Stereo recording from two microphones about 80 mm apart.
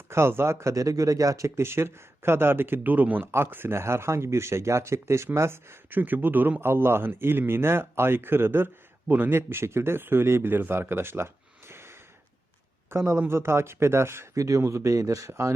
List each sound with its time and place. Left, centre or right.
0.1 s speech: right